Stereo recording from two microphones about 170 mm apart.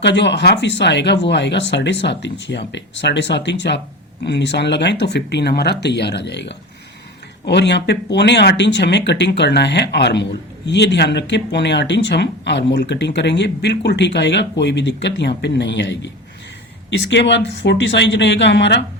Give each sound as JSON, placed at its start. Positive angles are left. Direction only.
{"t": 0.0, "sound": "speech", "side_deg": 90}
{"t": 17.1, "sound": "speech", "side_deg": 90}